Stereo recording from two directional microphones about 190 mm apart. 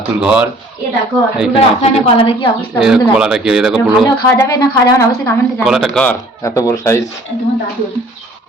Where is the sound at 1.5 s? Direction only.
30° left (ahead or behind).